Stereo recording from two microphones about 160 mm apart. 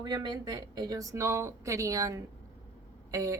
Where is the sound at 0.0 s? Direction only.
30° right (ahead or behind).